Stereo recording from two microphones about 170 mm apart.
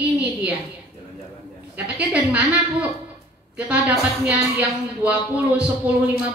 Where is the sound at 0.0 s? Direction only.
10° right (ahead or behind).